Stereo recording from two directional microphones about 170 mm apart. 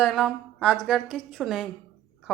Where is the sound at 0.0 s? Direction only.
Centre (ahead or behind).